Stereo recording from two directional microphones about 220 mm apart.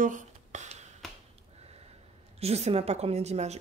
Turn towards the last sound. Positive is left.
turn(degrees=-30)  # may be behind; listen again after turning